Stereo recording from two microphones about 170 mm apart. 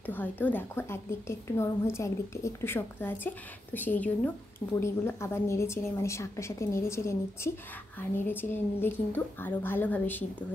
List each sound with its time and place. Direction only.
0.0 s a woman's voice: 10° left (ahead or behind)